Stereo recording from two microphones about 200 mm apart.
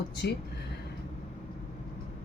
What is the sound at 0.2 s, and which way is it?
Speech, 55° left (ahead or behind).